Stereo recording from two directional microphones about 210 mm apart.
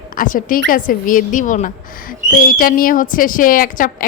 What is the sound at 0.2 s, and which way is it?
Speech, 40° left (ahead or behind).